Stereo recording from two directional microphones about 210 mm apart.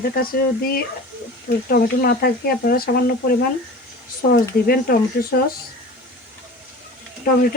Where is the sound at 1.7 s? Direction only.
45° left (ahead or behind).